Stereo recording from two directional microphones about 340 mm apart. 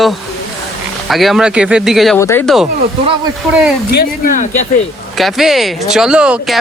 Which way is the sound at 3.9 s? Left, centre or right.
Left.